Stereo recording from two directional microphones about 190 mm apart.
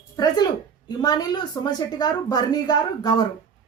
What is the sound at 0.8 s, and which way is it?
A woman's voice, 20° left (ahead or behind).